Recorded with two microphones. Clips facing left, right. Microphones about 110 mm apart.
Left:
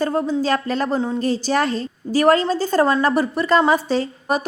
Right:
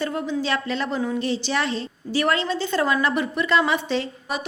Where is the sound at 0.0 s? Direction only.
35° left (ahead or behind).